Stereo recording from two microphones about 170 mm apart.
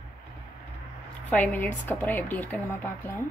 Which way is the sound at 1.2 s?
10° left (ahead or behind).